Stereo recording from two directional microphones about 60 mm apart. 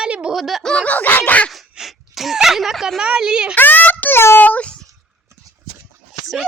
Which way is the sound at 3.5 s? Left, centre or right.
Left.